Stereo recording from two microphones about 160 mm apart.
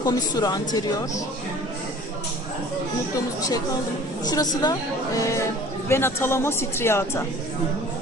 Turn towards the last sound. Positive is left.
turn(degrees=15)  # may be behind; listen again after turning